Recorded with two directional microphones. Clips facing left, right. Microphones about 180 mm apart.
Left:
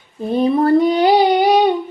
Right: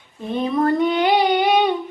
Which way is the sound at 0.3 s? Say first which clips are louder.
Left 5 dB; 35° left (ahead or behind).